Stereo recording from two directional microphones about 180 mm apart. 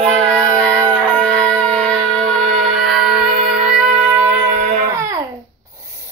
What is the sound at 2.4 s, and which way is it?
Music, 40° right (ahead or behind).